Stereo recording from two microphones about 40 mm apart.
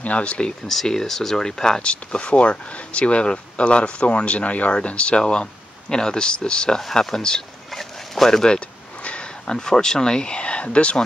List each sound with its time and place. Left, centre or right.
0.0 s speech: left
0.7 s speech: centre
6.8 s speech: centre
7.7 s a sound: centre
8.5 s a sound: left
9.5 s speech: centre